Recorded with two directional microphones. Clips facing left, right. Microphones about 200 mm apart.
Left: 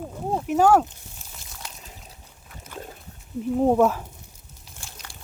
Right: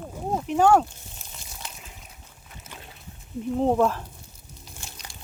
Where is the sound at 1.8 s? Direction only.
35° left (ahead or behind).